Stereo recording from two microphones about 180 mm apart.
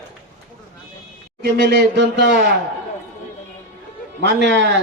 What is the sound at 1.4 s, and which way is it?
Speech, 65° right (ahead or behind).